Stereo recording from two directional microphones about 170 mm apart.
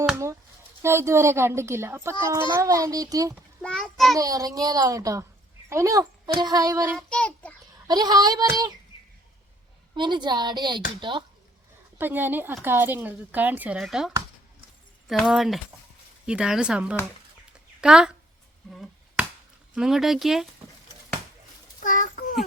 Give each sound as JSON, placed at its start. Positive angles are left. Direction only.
{"t": 0.8, "sound": "a woman's voice", "side_deg": -15}
{"t": 3.6, "sound": "speech", "side_deg": 5}
{"t": 4.2, "sound": "a woman's voice", "side_deg": -20}
{"t": 6.9, "sound": "speech", "side_deg": 5}
{"t": 7.9, "sound": "a woman's voice", "side_deg": -25}
{"t": 9.9, "sound": "a woman's voice", "side_deg": -25}
{"t": 11.9, "sound": "speech", "side_deg": -10}
{"t": 18.7, "sound": "finger snapping", "side_deg": 0}
{"t": 19.7, "sound": "speech", "side_deg": -5}
{"t": 21.8, "sound": "a sound", "side_deg": 50}